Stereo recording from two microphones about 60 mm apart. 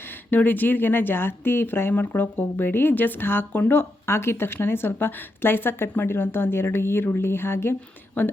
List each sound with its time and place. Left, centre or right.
0.3 s a woman's voice: left